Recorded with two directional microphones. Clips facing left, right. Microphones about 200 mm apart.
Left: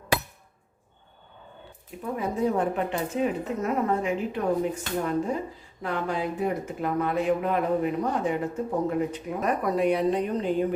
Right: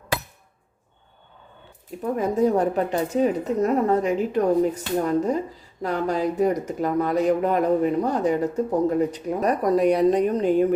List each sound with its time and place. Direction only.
2.1 s speech: 40° right (ahead or behind)